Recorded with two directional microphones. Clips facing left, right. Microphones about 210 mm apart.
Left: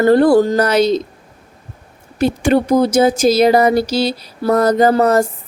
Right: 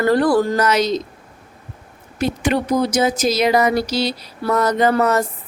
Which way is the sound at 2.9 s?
30° left (ahead or behind).